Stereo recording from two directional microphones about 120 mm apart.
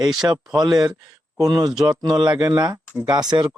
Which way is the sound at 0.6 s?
35° right (ahead or behind).